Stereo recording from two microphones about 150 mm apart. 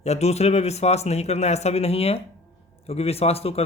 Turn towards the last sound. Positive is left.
turn(degrees=40)  # may be behind; listen again after turning